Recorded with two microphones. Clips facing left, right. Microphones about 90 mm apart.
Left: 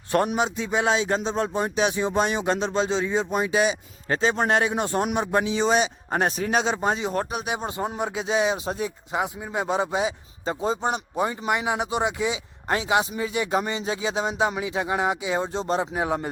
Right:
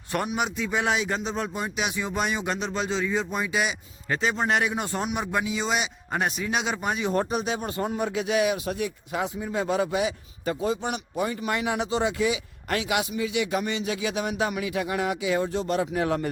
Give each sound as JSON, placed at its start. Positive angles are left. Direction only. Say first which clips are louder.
{"t": 0.3, "sound": "speech", "louder": "left 3 dB", "side_deg": 25}
{"t": 4.9, "sound": "speech", "louder": "left 5 dB", "side_deg": 45}
{"t": 5.1, "sound": "speech", "louder": "left 4 dB", "side_deg": 25}
{"t": 7.1, "sound": "speech", "louder": "right 2 dB", "side_deg": 0}
{"t": 7.4, "sound": "speech", "louder": "even", "side_deg": 15}
{"t": 16.0, "sound": "speech", "louder": "even", "side_deg": 15}